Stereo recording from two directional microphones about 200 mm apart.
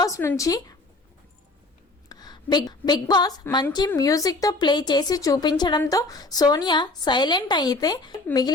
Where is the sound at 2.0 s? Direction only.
20° left (ahead or behind).